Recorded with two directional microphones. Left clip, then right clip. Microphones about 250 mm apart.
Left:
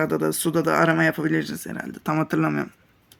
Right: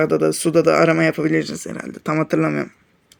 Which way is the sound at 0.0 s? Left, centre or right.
Centre.